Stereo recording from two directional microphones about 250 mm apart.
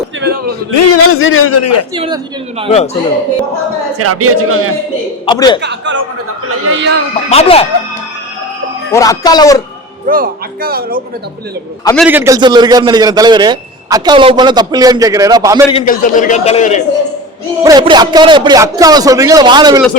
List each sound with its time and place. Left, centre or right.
0.2 s a sound: right
0.9 s speech: left
2.0 s speech: centre
2.6 s a man's voice: left
3.9 s speech: right
5.2 s a man's voice: centre
5.6 s a man's voice: right
7.3 s a man's voice: left
8.9 s a man's voice: centre
10.1 s speech: right
11.9 s a man's voice: centre
15.7 s a man's voice: left
17.6 s a man's voice: centre